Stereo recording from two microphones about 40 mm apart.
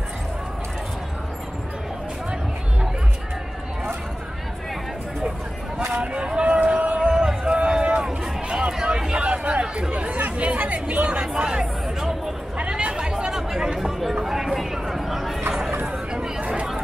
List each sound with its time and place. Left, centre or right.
5.9 s vehicle: right
6.6 s a sound: right
7.1 s run: right
8.8 s chatter: right
13.3 s chatter: centre
14.2 s a sound: centre
16.1 s chatter: right